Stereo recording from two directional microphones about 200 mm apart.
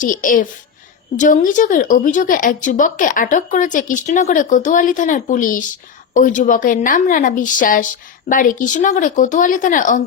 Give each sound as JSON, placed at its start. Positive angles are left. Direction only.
{"t": 0.0, "sound": "a child's voice", "side_deg": 40}